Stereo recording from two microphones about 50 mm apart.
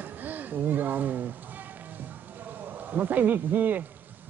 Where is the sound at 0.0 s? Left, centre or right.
Right.